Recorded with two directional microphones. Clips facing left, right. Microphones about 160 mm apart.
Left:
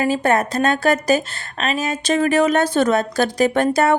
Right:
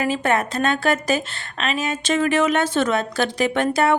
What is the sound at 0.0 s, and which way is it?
A woman's voice, 35° left (ahead or behind).